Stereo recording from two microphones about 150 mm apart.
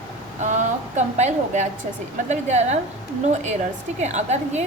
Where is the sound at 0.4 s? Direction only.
55° right (ahead or behind).